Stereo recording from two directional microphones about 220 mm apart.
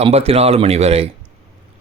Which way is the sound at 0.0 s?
25° right (ahead or behind).